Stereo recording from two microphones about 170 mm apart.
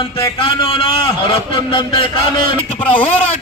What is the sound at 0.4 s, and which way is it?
A man's voice, 30° left (ahead or behind).